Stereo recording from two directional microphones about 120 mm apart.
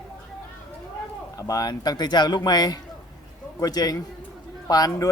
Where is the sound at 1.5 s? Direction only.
35° left (ahead or behind).